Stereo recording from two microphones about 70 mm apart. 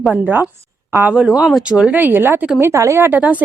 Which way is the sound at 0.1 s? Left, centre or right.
Right.